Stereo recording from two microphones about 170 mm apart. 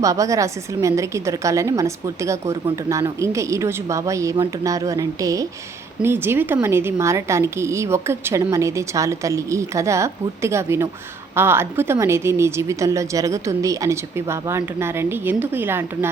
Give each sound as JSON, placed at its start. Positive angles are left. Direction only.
{"t": 0.0, "sound": "a woman's voice", "side_deg": -20}